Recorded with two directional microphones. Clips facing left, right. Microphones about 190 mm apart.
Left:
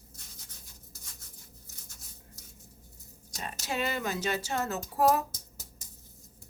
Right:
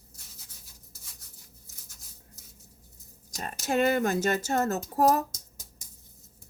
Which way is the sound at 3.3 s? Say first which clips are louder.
Right 7 dB; 45° right (ahead or behind).